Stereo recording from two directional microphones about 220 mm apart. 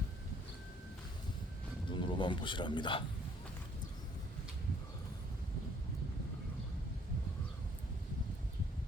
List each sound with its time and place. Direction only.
1.9 s speech: 20° left (ahead or behind)